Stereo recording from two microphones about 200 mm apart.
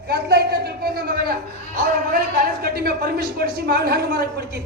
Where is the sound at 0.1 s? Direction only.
55° right (ahead or behind).